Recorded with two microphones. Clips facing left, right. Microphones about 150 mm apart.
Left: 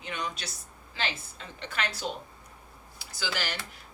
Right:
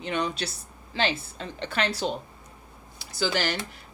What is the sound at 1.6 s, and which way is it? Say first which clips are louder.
Speech: right 6 dB; 30° right (ahead or behind).